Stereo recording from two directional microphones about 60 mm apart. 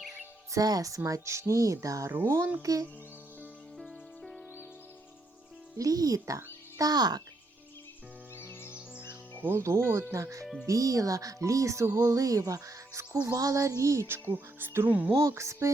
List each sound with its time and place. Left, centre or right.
0.5 s speech: right
2.2 s speech: right
2.6 s speech: right
3.8 s music: centre
5.7 s a child's voice: right
8.4 s music: left
9.6 s speech: right
12.1 s speech: right
14.1 s music: right
14.8 s speech: right
15.2 s speech: right